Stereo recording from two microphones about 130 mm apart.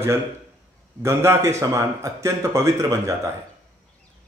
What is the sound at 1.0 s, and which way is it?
A man's voice, 20° right (ahead or behind).